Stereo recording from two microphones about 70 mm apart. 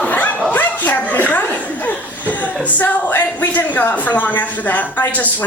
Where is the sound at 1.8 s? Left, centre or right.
Left.